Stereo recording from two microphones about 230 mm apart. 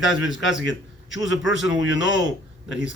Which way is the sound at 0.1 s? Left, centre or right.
Left.